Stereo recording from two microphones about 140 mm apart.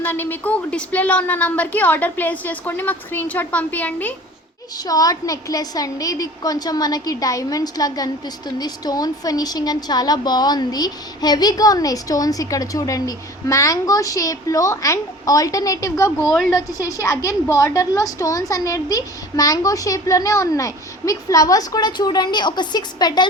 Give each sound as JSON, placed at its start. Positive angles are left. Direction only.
{"t": 0.0, "sound": "a woman's voice", "side_deg": 15}
{"t": 4.9, "sound": "a woman's voice", "side_deg": 25}